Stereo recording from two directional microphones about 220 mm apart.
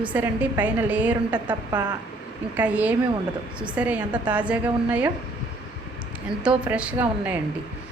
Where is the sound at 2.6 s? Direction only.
5° right (ahead or behind).